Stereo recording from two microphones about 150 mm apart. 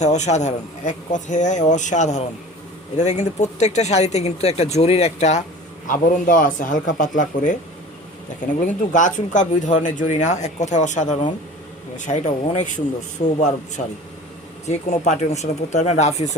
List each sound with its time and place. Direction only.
0.0 s speech: 50° left (ahead or behind)
5.9 s speech: 60° left (ahead or behind)
8.6 s speech: 60° left (ahead or behind)
14.7 s speech: 50° left (ahead or behind)